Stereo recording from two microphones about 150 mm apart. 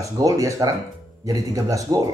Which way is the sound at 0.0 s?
20° right (ahead or behind).